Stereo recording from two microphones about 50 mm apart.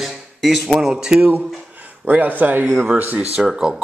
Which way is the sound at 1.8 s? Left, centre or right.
Right.